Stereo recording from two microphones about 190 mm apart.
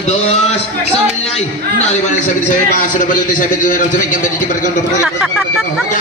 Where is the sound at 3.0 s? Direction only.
45° left (ahead or behind).